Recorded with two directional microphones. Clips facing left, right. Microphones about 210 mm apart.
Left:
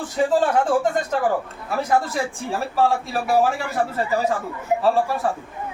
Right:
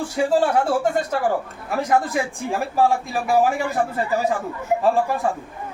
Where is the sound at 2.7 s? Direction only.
15° right (ahead or behind).